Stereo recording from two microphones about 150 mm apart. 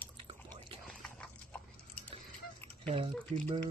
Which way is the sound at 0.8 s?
5° left (ahead or behind).